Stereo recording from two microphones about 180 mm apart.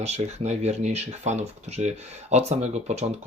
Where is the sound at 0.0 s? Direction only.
35° right (ahead or behind).